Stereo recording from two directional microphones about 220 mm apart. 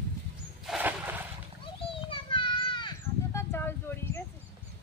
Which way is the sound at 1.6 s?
25° left (ahead or behind).